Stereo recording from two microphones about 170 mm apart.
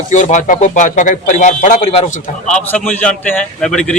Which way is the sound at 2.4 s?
5° left (ahead or behind).